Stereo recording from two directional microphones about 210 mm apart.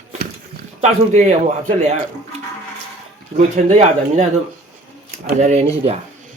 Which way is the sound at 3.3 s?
35° right (ahead or behind).